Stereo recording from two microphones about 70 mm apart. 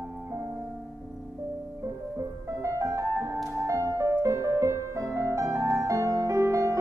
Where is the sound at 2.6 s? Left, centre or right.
Right.